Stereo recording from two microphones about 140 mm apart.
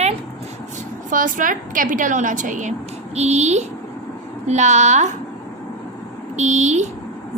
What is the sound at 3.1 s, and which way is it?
A woman's voice, 50° right (ahead or behind).